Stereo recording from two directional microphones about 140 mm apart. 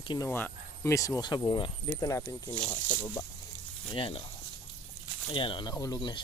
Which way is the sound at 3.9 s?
40° left (ahead or behind).